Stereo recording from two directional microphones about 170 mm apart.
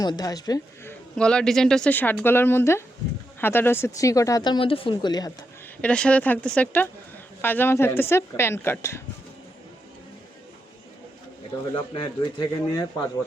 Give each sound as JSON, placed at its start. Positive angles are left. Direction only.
{"t": 0.0, "sound": "speech", "side_deg": 25}
{"t": 1.1, "sound": "a woman's voice", "side_deg": 5}
{"t": 5.8, "sound": "a woman's voice", "side_deg": 5}
{"t": 11.9, "sound": "speech", "side_deg": 25}